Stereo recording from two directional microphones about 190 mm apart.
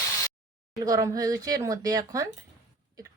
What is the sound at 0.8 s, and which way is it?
Speech, 20° right (ahead or behind).